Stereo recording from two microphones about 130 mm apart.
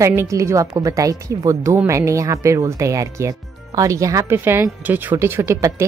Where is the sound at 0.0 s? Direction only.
20° right (ahead or behind).